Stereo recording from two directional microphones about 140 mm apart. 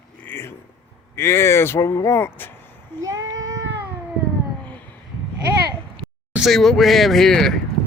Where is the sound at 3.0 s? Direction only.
25° right (ahead or behind).